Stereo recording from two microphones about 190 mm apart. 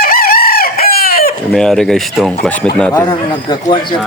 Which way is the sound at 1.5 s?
Centre (ahead or behind).